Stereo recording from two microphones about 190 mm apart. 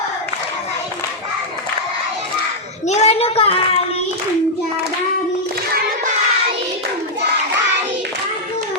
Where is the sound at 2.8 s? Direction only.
35° left (ahead or behind).